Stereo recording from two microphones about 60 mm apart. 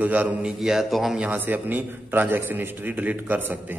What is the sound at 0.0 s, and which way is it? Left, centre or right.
Speech, right.